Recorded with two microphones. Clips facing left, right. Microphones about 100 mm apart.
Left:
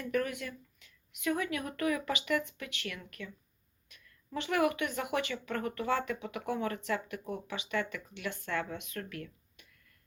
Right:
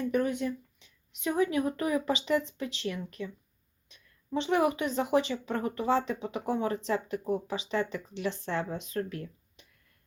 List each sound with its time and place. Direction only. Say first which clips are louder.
0.0 s a woman's voice: right 5 dB; 25° right (ahead or behind)